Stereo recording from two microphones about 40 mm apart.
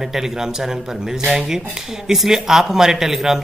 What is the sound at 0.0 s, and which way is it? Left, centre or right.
Speech, centre.